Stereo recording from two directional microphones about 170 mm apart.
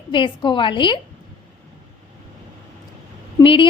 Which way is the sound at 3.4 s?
30° left (ahead or behind).